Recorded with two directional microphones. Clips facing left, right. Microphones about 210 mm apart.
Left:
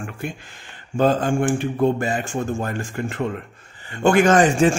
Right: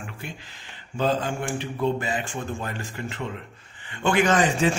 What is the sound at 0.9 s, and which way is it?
A man's voice, 50° left (ahead or behind).